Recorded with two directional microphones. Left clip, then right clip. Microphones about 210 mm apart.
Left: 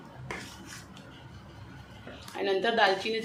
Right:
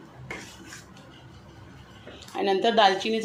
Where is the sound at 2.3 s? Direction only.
30° right (ahead or behind).